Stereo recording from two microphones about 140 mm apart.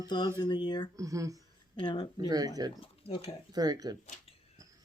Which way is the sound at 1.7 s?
35° left (ahead or behind).